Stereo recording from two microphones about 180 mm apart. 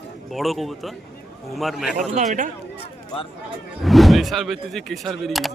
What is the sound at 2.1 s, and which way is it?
Speech, 45° right (ahead or behind).